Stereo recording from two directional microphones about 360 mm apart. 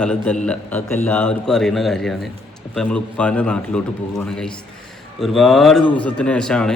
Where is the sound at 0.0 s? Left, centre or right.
Centre.